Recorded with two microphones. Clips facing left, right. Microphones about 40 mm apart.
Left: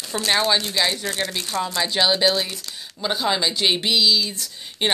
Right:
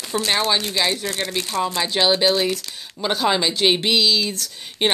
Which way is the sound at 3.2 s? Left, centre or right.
Right.